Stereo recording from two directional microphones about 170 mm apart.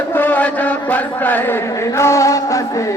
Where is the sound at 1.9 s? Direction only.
15° left (ahead or behind).